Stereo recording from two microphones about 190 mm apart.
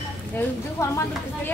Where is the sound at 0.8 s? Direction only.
15° left (ahead or behind).